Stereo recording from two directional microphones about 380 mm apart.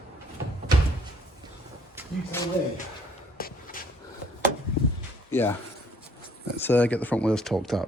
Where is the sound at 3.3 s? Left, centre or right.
Left.